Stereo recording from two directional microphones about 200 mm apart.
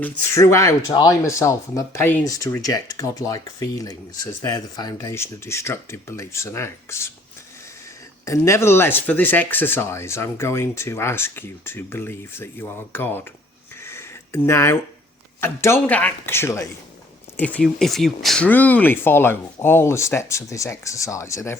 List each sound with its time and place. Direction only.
0.0 s speech: 15° left (ahead or behind)
8.2 s speech: 15° left (ahead or behind)
13.8 s a sound: 10° left (ahead or behind)
15.4 s speech: 10° left (ahead or behind)